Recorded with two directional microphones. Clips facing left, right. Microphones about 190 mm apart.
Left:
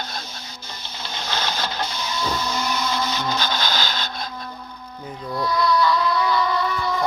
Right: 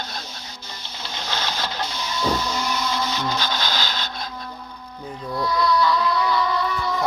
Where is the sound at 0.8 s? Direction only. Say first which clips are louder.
Left 1 dB; 50° left (ahead or behind).